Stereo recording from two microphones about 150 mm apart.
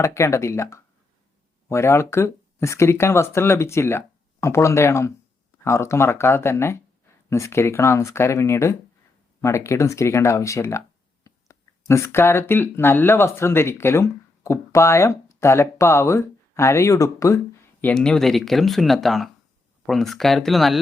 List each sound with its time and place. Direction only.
0.0 s speech: 20° left (ahead or behind); by 20.7 s centre (ahead or behind)